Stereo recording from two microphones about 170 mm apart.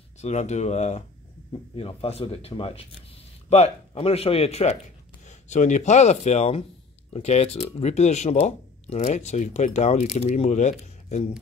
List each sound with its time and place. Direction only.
0.2 s speech: 40° left (ahead or behind)